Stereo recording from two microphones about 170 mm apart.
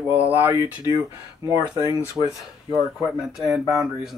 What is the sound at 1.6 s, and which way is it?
Speech, 15° right (ahead or behind).